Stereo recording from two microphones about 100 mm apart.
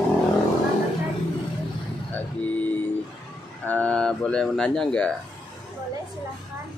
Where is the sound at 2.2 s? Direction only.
20° left (ahead or behind).